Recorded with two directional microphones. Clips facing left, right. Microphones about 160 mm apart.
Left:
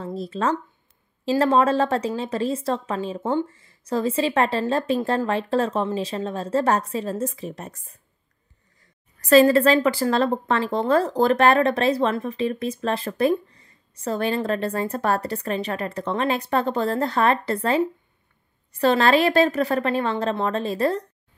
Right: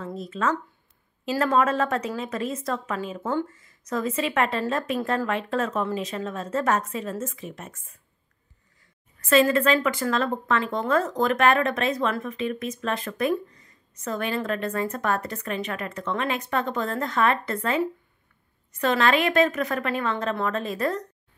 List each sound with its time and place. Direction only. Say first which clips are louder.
0.0 s a woman's voice: left 2 dB; 35° left (ahead or behind)
9.2 s a woman's voice: left 5 dB; 35° left (ahead or behind)